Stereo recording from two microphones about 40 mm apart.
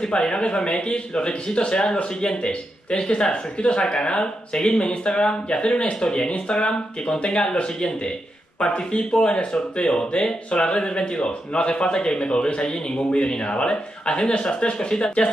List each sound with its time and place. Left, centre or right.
0.0 s speech: left